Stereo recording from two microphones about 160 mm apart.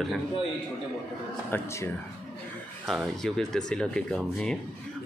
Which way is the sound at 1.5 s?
15° left (ahead or behind).